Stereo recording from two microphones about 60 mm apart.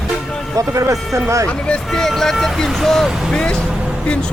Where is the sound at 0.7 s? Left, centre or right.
Right.